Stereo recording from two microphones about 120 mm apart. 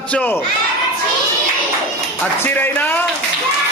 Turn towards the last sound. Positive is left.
turn(degrees=15)  # may be behind; listen again after turning